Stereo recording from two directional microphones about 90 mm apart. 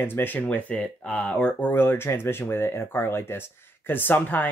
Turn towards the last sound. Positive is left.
turn(degrees=20)  # may be behind; listen again after turning